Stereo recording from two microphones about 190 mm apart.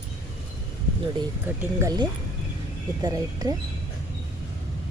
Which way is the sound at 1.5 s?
20° right (ahead or behind).